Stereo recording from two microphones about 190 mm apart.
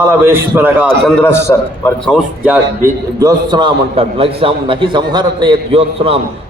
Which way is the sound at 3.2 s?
25° right (ahead or behind).